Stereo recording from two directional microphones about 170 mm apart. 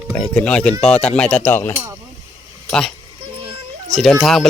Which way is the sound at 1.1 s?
5° left (ahead or behind).